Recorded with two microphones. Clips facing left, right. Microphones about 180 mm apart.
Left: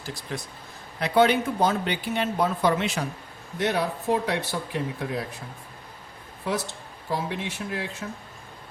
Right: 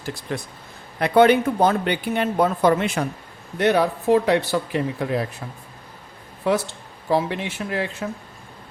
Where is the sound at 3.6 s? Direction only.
75° right (ahead or behind).